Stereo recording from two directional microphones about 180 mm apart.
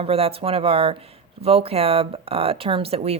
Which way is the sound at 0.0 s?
35° right (ahead or behind).